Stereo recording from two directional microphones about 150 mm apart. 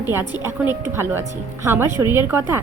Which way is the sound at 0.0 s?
15° right (ahead or behind).